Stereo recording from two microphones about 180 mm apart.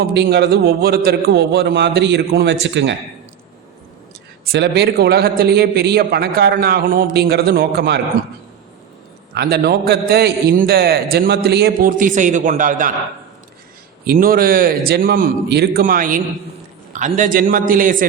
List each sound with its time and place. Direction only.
0.0 s a man's voice: 65° right (ahead or behind); by 2.9 s 85° right
4.5 s a man's voice: 70° right (ahead or behind)
9.3 s a man's voice: 65° right (ahead or behind); by 12.9 s 45° right (ahead or behind)
14.1 s a man's voice: 55° right (ahead or behind)